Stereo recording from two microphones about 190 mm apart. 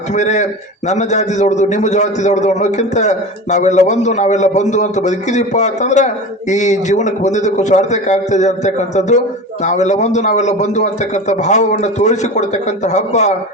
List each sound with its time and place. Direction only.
0.1 s a man's voice: 40° left (ahead or behind)